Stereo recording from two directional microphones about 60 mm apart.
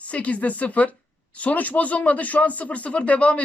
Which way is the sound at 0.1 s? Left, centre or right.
Left.